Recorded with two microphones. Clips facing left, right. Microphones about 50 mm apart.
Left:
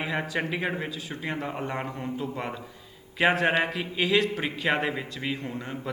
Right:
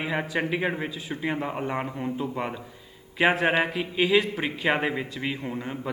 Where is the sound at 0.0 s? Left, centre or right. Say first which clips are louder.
Right 2 dB; centre.